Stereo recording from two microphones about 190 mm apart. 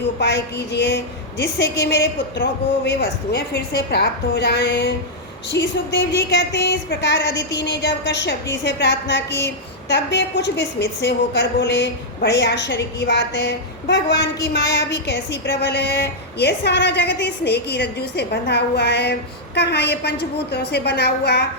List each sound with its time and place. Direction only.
0.2 s a woman's voice: 65° left (ahead or behind)